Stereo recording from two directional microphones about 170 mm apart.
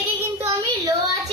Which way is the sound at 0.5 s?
20° right (ahead or behind).